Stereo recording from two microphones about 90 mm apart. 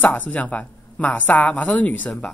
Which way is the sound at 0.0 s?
20° left (ahead or behind).